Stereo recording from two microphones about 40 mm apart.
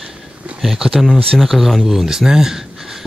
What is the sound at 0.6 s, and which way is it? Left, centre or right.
Speech, centre.